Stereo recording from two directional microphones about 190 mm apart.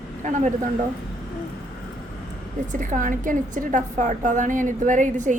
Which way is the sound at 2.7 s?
40° right (ahead or behind).